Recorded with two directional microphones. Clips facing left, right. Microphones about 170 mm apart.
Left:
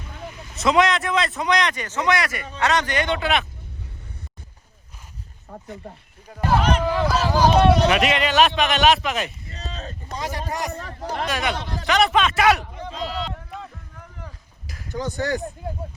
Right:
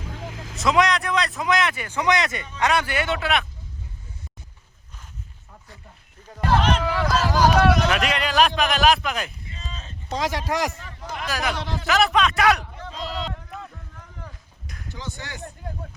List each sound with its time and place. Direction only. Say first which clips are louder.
0.0 s vehicle: right 2 dB; 90° right
0.5 s speech: left 2 dB; centre (ahead or behind); by 2.5 s 20° right (ahead or behind)
2.6 s a man's voice: left 1 dB; 10° right (ahead or behind)
6.2 s speech: left 1 dB; 10° left (ahead or behind); by 7.9 s 25° left (ahead or behind)
7.9 s speech: left 4 dB; centre (ahead or behind)
9.5 s a sound: left 5 dB; 40° left (ahead or behind)
10.1 s speech: right 4 dB; 90° right
10.8 s speech: left 6 dB; 40° left (ahead or behind)
11.3 s speech: right 3 dB; centre (ahead or behind)
14.7 s a sound: left 1 dB; centre (ahead or behind)
14.9 s speech: left 12 dB; 45° left (ahead or behind)